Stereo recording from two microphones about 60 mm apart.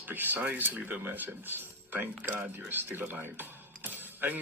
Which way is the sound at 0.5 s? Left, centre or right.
Right.